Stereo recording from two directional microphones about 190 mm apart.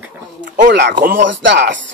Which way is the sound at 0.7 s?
70° right (ahead or behind).